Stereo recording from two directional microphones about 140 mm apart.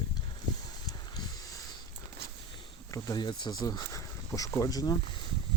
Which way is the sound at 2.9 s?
25° left (ahead or behind).